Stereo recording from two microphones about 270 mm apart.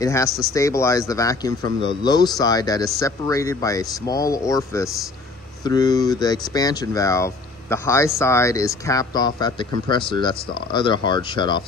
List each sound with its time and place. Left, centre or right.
0.0 s speech: centre